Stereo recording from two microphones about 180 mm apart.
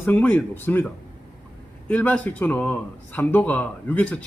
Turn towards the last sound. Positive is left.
turn(degrees=5)  # may be behind; listen again after turning